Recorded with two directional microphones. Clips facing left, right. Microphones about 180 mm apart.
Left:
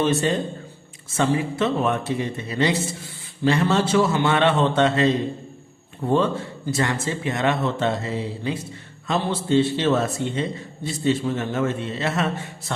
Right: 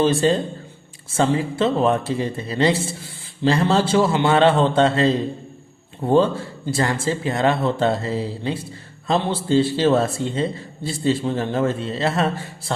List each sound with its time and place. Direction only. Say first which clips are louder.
0.0 s a man's voice: right 3 dB; 30° right (ahead or behind)